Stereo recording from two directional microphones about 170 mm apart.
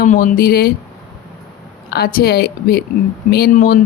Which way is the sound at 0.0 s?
50° left (ahead or behind).